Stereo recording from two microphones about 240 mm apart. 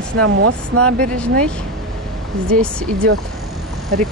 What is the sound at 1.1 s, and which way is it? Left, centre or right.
Speech, centre.